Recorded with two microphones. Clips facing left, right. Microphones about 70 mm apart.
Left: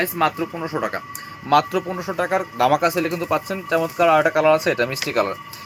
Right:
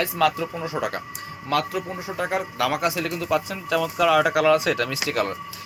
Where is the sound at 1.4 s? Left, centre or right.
Left.